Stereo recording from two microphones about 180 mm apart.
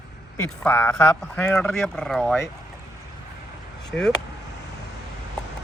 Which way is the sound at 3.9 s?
5° left (ahead or behind).